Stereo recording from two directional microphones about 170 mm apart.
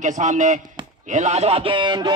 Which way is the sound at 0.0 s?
45° right (ahead or behind).